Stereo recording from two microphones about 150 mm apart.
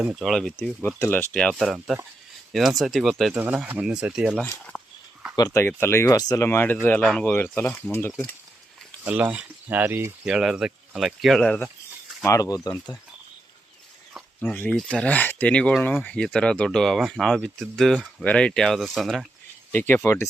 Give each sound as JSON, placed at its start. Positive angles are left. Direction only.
{"t": 0.0, "sound": "speech", "side_deg": -5}
{"t": 0.8, "sound": "speech", "side_deg": 15}
{"t": 1.3, "sound": "speech", "side_deg": 5}
{"t": 4.7, "sound": "a sound", "side_deg": 0}
{"t": 5.5, "sound": "speech", "side_deg": 15}
{"t": 9.0, "sound": "speech", "side_deg": -10}
{"t": 12.2, "sound": "speech", "side_deg": 20}
{"t": 14.4, "sound": "speech", "side_deg": 15}
{"t": 19.7, "sound": "speech", "side_deg": 15}